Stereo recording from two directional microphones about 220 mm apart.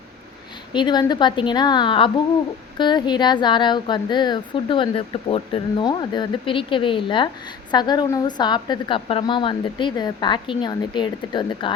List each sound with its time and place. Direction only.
0.7 s speech: 20° left (ahead or behind)